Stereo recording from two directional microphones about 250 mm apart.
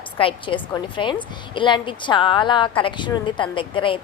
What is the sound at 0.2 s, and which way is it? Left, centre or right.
A woman's voice, left.